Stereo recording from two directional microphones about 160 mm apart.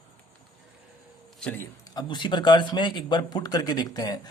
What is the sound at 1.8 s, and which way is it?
A man's voice, 25° left (ahead or behind).